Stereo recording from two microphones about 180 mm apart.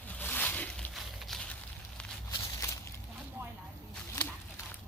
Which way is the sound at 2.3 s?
15° left (ahead or behind).